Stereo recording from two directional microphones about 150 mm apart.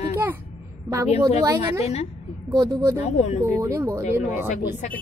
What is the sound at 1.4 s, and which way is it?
Speech, 25° right (ahead or behind).